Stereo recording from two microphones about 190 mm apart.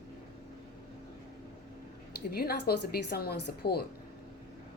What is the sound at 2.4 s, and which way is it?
A woman's voice, 55° left (ahead or behind).